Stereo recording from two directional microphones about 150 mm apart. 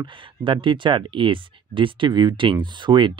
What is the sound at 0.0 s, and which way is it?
Speech, 35° right (ahead or behind).